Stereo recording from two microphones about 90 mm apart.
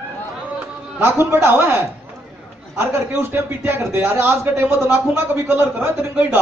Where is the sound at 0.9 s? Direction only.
25° right (ahead or behind).